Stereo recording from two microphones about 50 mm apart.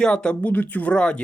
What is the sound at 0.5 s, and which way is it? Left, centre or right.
Speech, left.